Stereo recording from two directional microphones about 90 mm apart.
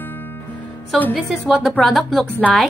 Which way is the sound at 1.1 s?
5° left (ahead or behind).